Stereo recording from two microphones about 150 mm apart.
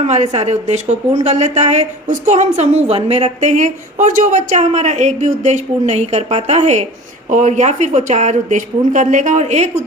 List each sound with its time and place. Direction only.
0.0 s speech: 50° right (ahead or behind)